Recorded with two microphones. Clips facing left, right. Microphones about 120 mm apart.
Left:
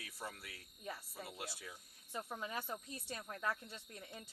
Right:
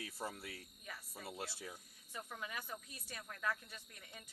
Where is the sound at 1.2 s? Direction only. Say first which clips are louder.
Right 3 dB; 30° right (ahead or behind).